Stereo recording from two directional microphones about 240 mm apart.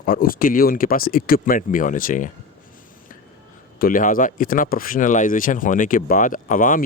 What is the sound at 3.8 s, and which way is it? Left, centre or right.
Speech, left.